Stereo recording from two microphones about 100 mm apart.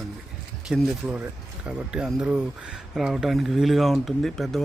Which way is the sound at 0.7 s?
15° right (ahead or behind).